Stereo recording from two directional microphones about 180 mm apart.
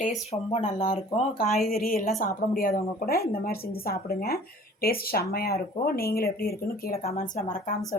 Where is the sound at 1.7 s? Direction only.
55° left (ahead or behind).